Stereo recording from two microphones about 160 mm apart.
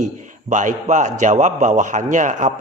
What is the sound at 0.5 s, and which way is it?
A man's voice, 50° right (ahead or behind).